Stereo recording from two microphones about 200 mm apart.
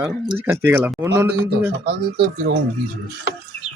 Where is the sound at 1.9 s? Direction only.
55° right (ahead or behind).